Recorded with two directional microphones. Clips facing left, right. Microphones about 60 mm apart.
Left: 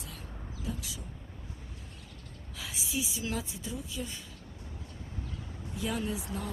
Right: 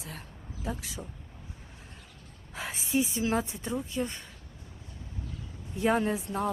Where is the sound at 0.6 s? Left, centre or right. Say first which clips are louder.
Right 4 dB; right.